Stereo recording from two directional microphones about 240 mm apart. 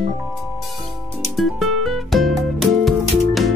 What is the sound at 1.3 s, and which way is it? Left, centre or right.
Music, centre.